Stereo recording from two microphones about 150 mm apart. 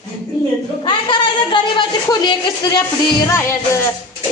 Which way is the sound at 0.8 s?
30° left (ahead or behind).